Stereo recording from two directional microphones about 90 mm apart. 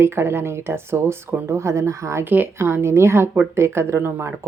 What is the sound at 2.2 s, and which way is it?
Speech, 20° right (ahead or behind).